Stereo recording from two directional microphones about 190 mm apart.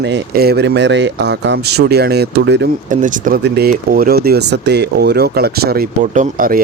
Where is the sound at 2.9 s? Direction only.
45° right (ahead or behind).